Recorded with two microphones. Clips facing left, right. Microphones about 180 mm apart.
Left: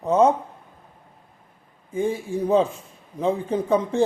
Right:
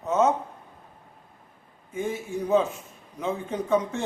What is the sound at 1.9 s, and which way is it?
Speech, 35° left (ahead or behind).